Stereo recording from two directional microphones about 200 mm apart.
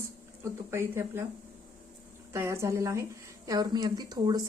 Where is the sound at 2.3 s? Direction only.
15° right (ahead or behind).